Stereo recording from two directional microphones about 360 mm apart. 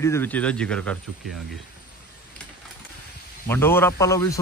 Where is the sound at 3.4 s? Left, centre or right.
Centre.